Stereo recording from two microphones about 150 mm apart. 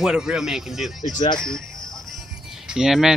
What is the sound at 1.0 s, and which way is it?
Speech, 55° left (ahead or behind).